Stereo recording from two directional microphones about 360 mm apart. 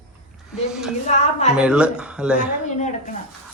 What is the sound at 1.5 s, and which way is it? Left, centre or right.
Speech, centre.